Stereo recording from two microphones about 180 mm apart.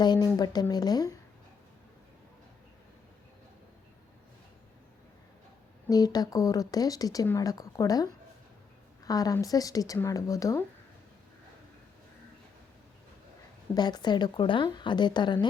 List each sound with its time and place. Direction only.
0.0 s speech: 25° left (ahead or behind)
5.9 s speech: 20° left (ahead or behind)
13.7 s speech: 25° left (ahead or behind)